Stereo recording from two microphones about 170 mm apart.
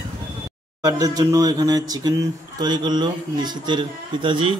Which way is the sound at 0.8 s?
20° right (ahead or behind).